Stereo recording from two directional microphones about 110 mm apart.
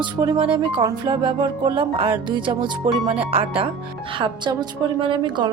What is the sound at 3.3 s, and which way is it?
Speech, 55° right (ahead or behind).